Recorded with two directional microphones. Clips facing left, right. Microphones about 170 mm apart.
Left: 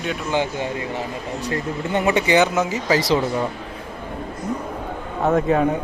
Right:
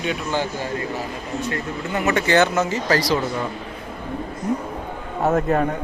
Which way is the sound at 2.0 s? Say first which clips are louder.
Even; 10° left (ahead or behind).